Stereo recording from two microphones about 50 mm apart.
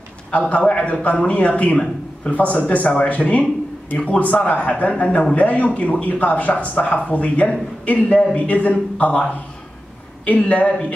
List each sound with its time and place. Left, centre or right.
0.3 s a man's voice: left